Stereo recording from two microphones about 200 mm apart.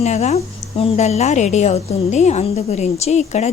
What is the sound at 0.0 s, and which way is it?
A woman's voice, 35° left (ahead or behind).